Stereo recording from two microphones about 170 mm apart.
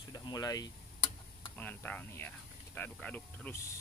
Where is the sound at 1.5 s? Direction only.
10° left (ahead or behind).